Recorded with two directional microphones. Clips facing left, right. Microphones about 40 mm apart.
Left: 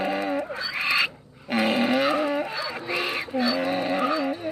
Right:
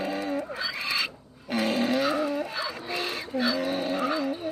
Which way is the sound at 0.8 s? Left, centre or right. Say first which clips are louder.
Left 6 dB; left.